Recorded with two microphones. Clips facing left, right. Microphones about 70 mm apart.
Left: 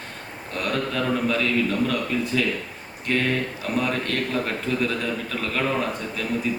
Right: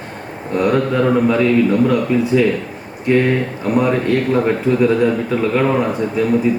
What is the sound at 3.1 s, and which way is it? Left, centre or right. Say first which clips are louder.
Speech: right 9 dB; right.